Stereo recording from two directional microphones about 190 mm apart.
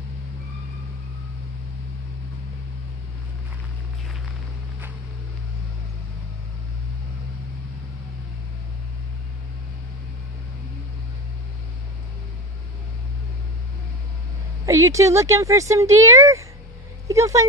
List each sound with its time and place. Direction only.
14.7 s speech: 15° right (ahead or behind)